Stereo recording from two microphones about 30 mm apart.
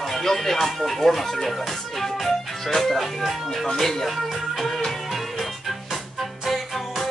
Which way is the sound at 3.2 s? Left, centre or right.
Centre.